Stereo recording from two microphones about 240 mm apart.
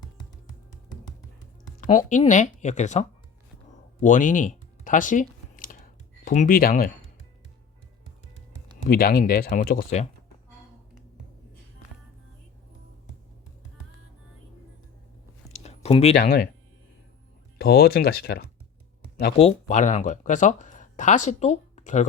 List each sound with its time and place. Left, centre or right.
1.8 s speech: left
4.0 s a sound: left
6.2 s speech: left
8.9 s speech: left
15.5 s a sound: left
17.6 s speech: left
19.4 s speech: left